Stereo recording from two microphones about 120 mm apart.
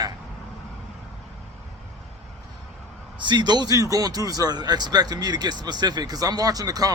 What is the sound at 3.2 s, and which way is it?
Speech, 40° right (ahead or behind).